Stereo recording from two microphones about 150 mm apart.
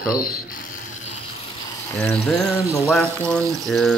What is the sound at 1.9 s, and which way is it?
Speech, 5° left (ahead or behind).